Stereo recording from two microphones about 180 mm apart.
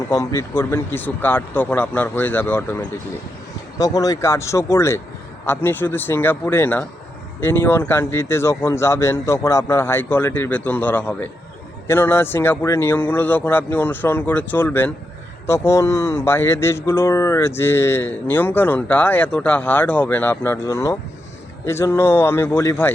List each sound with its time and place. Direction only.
0.1 s speech: 20° left (ahead or behind)